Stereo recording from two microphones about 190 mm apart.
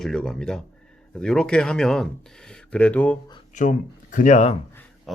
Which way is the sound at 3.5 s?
40° left (ahead or behind).